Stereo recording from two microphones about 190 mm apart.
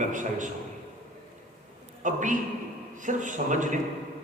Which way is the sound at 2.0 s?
40° right (ahead or behind).